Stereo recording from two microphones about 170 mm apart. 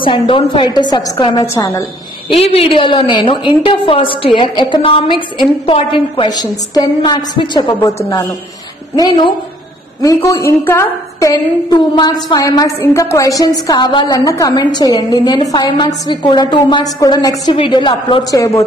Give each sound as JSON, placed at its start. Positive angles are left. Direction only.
{"t": 0.0, "sound": "a woman's voice", "side_deg": 30}
{"t": 2.3, "sound": "a woman's voice", "side_deg": 35}